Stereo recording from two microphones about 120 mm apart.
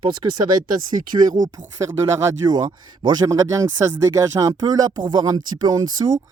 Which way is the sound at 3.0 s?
35° right (ahead or behind).